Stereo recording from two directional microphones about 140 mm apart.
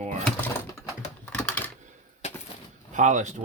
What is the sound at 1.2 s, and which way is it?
Typing, 10° left (ahead or behind).